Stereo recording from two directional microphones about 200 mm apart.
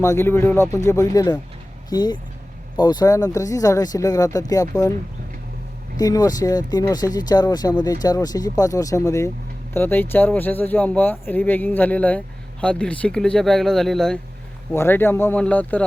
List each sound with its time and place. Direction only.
0.0 s speech: 15° left (ahead or behind)
6.0 s speech: 20° left (ahead or behind)